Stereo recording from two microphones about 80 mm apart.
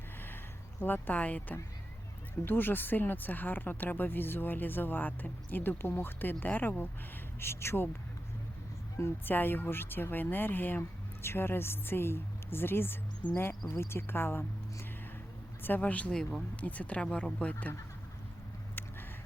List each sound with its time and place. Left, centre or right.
0.8 s speech: left
9.0 s speech: left
15.6 s speech: left